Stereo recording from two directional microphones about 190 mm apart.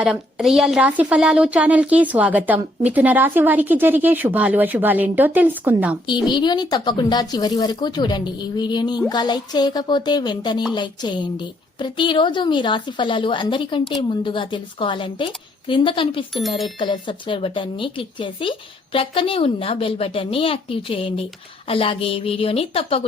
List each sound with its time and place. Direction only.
0.0 s a woman's voice: 5° right (ahead or behind)
6.2 s speech: 25° left (ahead or behind)